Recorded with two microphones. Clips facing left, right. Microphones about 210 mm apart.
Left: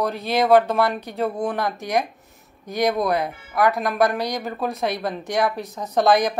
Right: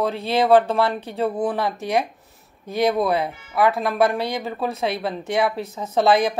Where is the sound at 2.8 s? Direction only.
5° right (ahead or behind).